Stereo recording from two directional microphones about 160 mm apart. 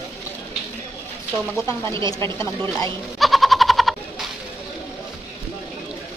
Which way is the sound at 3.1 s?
Centre (ahead or behind).